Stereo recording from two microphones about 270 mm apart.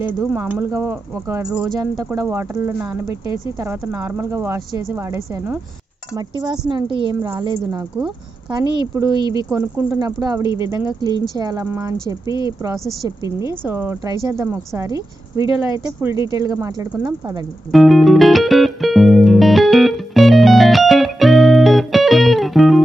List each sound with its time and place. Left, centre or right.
0.0 s a woman's voice: centre
17.7 s music: centre